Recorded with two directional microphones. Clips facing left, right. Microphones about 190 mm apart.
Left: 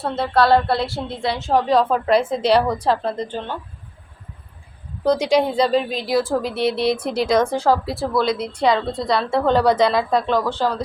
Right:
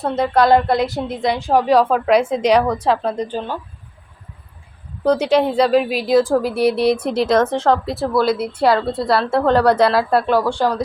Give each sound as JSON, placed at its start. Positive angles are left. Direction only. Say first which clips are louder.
{"t": 0.0, "sound": "a woman's voice", "louder": "right 3 dB", "side_deg": -15}
{"t": 5.0, "sound": "a woman's voice", "louder": "right 2 dB", "side_deg": -5}
{"t": 6.1, "sound": "a woman's voice", "louder": "right 7 dB", "side_deg": -20}
{"t": 6.6, "sound": "speech", "louder": "right 4 dB", "side_deg": 25}
{"t": 7.0, "sound": "a woman's voice", "louder": "right 2 dB", "side_deg": -5}